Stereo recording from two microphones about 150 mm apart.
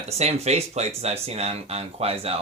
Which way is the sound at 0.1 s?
45° right (ahead or behind).